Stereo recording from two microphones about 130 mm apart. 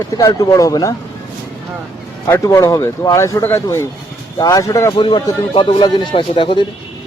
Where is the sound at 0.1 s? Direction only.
25° left (ahead or behind).